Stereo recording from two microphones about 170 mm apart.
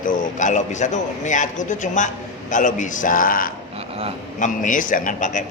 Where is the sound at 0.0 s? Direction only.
45° left (ahead or behind).